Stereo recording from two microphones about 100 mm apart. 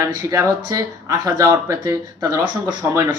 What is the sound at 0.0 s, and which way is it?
Speech, 35° right (ahead or behind).